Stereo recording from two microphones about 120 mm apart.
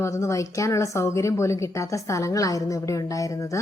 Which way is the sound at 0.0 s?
25° left (ahead or behind).